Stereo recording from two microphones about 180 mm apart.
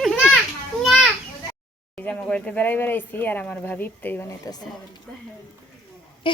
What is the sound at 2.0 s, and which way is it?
Speech, 10° left (ahead or behind).